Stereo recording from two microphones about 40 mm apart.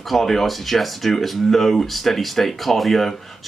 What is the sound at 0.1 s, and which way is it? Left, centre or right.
Speech, centre.